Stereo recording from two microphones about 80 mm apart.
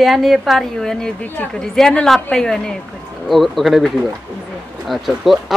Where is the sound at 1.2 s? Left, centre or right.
Left.